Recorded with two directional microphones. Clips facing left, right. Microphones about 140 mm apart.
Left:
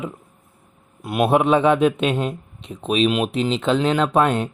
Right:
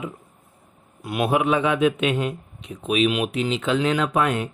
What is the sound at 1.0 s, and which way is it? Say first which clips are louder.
Speech: left 4 dB; 25° left (ahead or behind).